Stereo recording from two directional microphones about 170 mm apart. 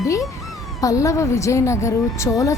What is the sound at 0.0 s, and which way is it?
A woman's voice, 20° left (ahead or behind).